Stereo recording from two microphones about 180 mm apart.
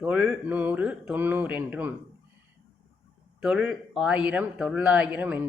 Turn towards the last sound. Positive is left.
turn(degrees=-10)  # may be behind; listen again after turning